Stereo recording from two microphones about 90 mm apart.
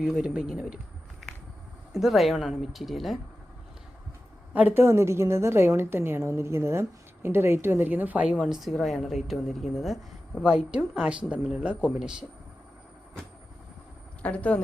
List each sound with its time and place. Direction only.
0.0 s a woman's voice: 10° right (ahead or behind)
1.9 s speech: centre (ahead or behind)
4.5 s a woman's voice: 25° right (ahead or behind)
8.4 s speech: 5° right (ahead or behind)
10.4 s a woman's voice: 10° right (ahead or behind)
14.2 s speech: 15° left (ahead or behind)